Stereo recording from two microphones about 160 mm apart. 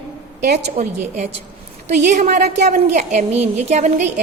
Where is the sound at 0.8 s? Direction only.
45° right (ahead or behind).